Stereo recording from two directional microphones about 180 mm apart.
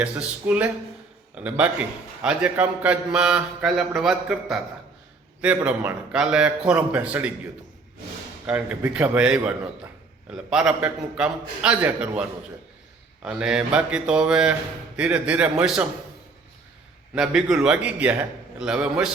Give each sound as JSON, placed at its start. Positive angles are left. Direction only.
{"t": 0.0, "sound": "a man's voice", "side_deg": -5}
{"t": 8.4, "sound": "a man's voice", "side_deg": -5}
{"t": 10.5, "sound": "a man's voice", "side_deg": -5}
{"t": 13.2, "sound": "a man's voice", "side_deg": -5}
{"t": 17.2, "sound": "a man's voice", "side_deg": -5}